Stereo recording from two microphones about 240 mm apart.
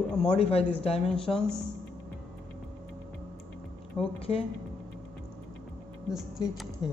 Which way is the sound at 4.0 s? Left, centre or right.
Centre.